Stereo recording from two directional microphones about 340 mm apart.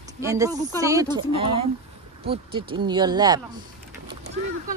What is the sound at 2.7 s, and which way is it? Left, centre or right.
Speech, centre.